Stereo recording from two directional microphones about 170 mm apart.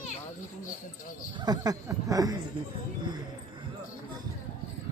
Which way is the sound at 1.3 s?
20° right (ahead or behind).